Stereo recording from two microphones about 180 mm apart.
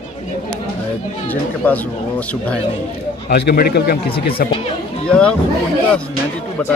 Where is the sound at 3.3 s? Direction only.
65° left (ahead or behind).